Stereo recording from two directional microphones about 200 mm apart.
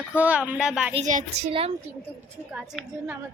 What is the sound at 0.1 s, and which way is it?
Speech, 5° right (ahead or behind).